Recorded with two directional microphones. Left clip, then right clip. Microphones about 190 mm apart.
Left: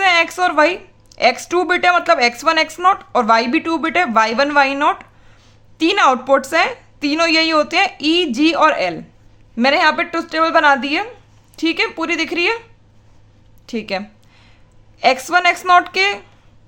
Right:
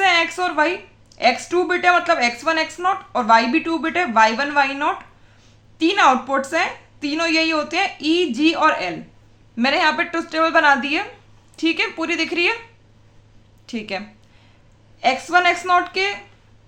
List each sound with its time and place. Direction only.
0.0 s a woman's voice: 40° left (ahead or behind)
13.7 s a woman's voice: 30° left (ahead or behind)